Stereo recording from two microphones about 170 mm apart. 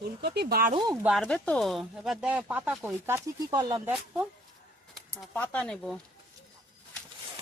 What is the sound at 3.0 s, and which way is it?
Speech, 20° right (ahead or behind).